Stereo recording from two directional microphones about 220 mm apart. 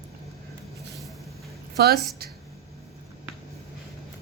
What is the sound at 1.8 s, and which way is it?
Speech, 45° right (ahead or behind).